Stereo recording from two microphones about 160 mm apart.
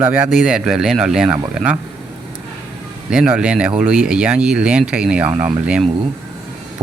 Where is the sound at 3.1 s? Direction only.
5° right (ahead or behind).